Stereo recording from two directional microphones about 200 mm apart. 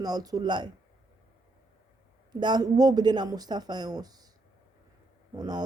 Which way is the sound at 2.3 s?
20° right (ahead or behind).